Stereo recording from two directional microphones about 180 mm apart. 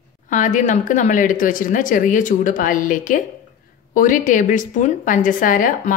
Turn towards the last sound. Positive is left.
turn(degrees=45)  # may be behind; listen again after turning